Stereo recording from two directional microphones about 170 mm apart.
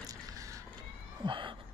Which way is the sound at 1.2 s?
30° right (ahead or behind).